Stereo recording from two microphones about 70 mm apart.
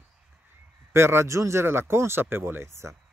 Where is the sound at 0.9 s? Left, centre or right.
Right.